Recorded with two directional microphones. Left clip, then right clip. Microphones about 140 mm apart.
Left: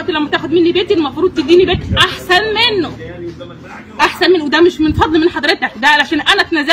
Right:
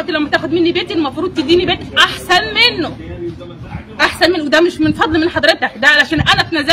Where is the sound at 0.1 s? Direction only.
40° right (ahead or behind).